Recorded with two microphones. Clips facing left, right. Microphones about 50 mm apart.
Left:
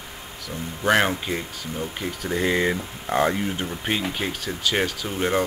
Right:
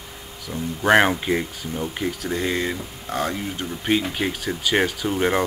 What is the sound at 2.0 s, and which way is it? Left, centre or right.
Speech, centre.